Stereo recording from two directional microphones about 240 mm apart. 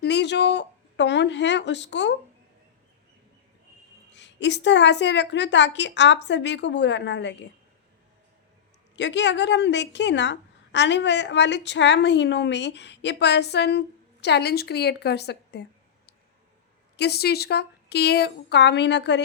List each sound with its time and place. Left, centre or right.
0.0 s a sound: left
4.1 s a woman's voice: left
9.0 s a woman's voice: left
17.0 s a woman's voice: left